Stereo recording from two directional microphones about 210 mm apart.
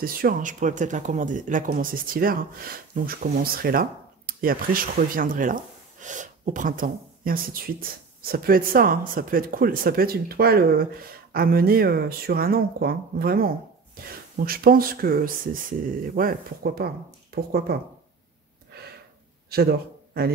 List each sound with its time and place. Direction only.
0.0 s speech: 45° right (ahead or behind)
19.5 s speech: 50° right (ahead or behind)